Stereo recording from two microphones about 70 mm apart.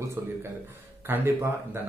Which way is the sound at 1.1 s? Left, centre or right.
Right.